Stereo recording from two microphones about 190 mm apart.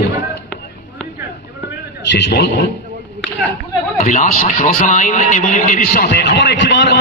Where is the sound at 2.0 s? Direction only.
65° left (ahead or behind).